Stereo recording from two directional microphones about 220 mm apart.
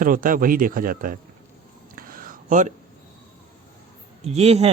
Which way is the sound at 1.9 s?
40° right (ahead or behind).